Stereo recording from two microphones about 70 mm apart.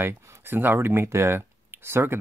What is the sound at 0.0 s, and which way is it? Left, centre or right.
Speech, right.